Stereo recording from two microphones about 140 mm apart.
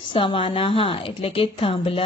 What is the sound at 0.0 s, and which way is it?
A woman's voice, 35° left (ahead or behind).